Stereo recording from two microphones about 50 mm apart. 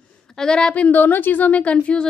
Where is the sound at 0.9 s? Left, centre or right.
Left.